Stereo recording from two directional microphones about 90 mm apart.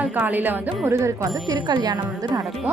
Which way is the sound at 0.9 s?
30° right (ahead or behind).